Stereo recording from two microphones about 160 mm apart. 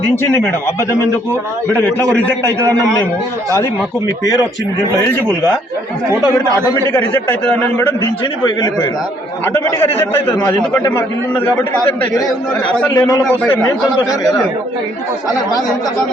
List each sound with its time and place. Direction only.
0.2 s a man's voice: 15° left (ahead or behind)
2.5 s a man's voice: 20° right (ahead or behind)
7.3 s a man's voice: 10° left (ahead or behind)
10.0 s a man's voice: 15° left (ahead or behind)
12.6 s a man's voice: 10° left (ahead or behind)